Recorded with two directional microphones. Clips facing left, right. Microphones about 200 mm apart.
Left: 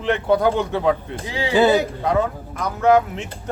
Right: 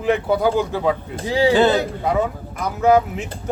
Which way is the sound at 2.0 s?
5° right (ahead or behind).